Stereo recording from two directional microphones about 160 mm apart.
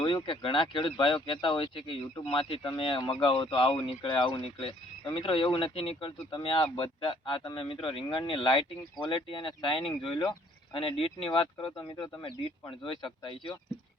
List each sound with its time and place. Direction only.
0.0 s speech: 30° left (ahead or behind)